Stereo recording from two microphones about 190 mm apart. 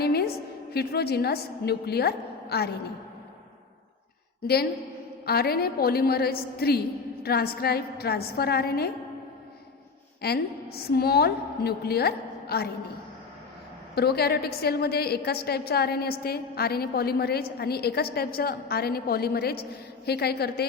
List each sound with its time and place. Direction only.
0.0 s a sound: 55° left (ahead or behind)
0.7 s a woman's voice: 55° left (ahead or behind)
5.2 s a woman's voice: 55° left (ahead or behind)
10.2 s a woman's voice: 55° left (ahead or behind)
13.9 s a woman's voice: 55° left (ahead or behind)